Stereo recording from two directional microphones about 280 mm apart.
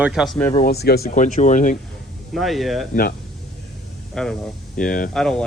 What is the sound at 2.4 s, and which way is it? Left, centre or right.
Speech, centre.